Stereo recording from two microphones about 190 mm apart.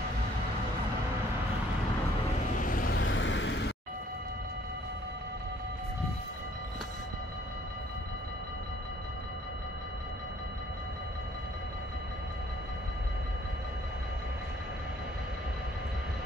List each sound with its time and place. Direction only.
2.6 s vehicle: 45° left (ahead or behind)
3.0 s vehicle: 75° left (ahead or behind)